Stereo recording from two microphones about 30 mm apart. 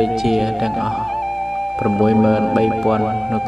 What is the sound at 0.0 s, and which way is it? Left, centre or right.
Speech, centre.